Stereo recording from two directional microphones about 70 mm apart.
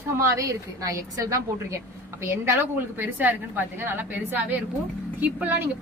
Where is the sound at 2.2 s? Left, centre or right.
Right.